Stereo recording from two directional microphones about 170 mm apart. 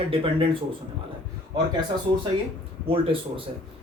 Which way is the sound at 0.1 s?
30° right (ahead or behind).